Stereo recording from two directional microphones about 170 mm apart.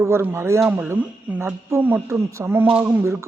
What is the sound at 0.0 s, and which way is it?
Speech, 15° right (ahead or behind).